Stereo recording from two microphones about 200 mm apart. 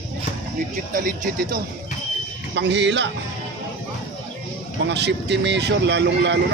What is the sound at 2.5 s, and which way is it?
Speech, 60° right (ahead or behind).